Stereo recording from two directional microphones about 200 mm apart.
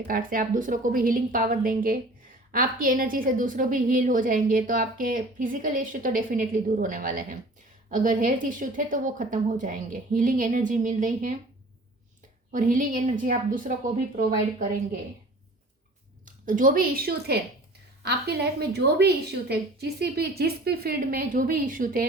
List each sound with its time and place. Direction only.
0.1 s a woman's voice: 45° right (ahead or behind)
12.5 s speech: 40° right (ahead or behind)
16.2 s a woman's voice: 40° right (ahead or behind)